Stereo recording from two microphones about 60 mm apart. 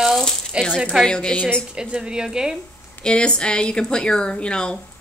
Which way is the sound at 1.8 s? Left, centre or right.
Centre.